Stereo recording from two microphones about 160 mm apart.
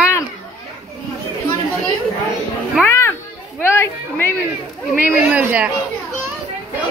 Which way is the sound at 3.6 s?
15° left (ahead or behind).